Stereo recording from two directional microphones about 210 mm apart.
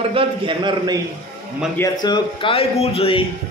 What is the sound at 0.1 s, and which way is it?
Speech, 25° right (ahead or behind).